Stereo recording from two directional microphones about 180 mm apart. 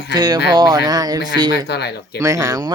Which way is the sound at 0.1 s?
25° right (ahead or behind).